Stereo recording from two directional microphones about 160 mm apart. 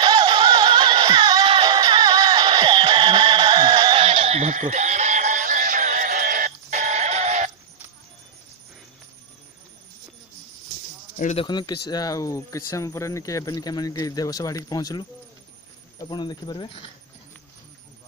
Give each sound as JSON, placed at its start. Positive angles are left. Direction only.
{"t": 0.0, "sound": "music", "side_deg": -30}
{"t": 11.3, "sound": "speech", "side_deg": 30}